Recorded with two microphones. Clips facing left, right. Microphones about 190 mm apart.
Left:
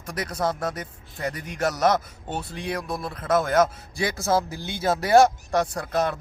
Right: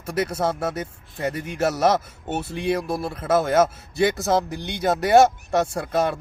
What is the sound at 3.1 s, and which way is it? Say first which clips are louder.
Speech: right 2 dB; 5° right (ahead or behind).